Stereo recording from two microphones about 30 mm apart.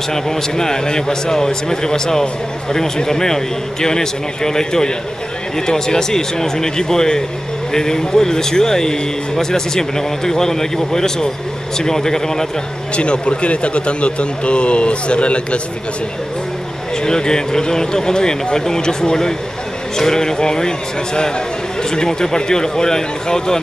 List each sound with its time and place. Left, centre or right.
0.1 s a man's voice: centre
12.9 s speech: left
17.0 s speech: left